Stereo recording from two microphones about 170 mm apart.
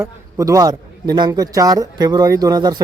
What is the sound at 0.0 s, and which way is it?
A man's voice, 20° right (ahead or behind).